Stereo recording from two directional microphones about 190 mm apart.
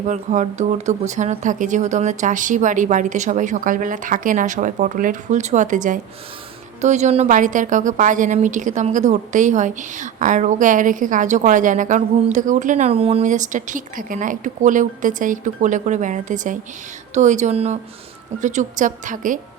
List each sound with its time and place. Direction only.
0.1 s a woman's voice: 40° right (ahead or behind)